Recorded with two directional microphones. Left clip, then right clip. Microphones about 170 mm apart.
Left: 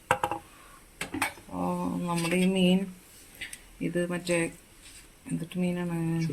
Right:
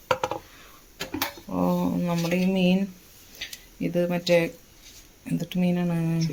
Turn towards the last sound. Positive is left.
turn(degrees=-45)  # may be behind; listen again after turning